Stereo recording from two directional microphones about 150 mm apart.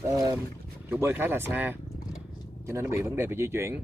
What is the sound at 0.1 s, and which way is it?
Boat, 25° right (ahead or behind).